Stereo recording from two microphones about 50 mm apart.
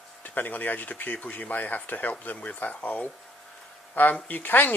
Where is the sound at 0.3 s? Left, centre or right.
Left.